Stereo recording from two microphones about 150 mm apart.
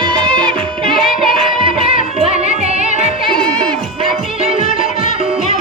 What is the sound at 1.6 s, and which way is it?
Music, 40° right (ahead or behind).